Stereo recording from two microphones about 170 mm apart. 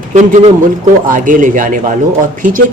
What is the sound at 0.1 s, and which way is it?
A man's voice, 45° right (ahead or behind).